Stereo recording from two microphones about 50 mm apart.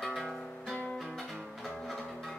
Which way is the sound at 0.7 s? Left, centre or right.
Left.